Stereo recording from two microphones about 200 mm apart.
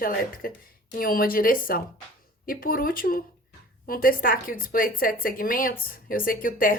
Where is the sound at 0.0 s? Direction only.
45° left (ahead or behind).